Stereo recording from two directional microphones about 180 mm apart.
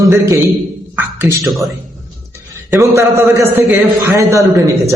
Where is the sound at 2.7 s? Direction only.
15° right (ahead or behind).